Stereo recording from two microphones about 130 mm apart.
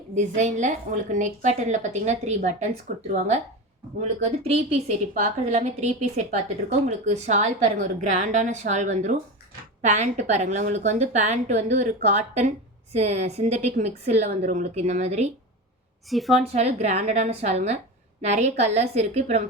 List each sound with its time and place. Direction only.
0.1 s a woman's voice: 65° right (ahead or behind)
16.0 s a woman's voice: centre (ahead or behind)
16.5 s a woman's voice: 55° right (ahead or behind)